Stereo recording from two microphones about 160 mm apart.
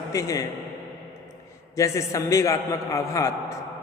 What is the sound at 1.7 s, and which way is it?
A man's voice, 20° left (ahead or behind).